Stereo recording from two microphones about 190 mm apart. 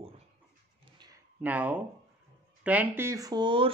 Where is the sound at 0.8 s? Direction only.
20° right (ahead or behind).